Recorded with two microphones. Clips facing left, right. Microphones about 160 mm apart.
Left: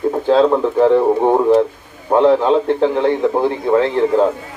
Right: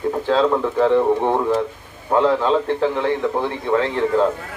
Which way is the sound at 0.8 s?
15° left (ahead or behind).